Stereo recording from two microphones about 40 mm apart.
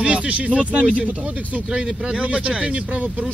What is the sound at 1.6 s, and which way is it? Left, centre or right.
A man's voice, right.